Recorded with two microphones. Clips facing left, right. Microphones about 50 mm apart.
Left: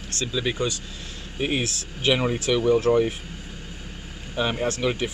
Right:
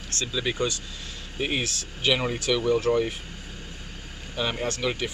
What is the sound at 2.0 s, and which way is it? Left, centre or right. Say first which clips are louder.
Speech: left 2 dB; centre.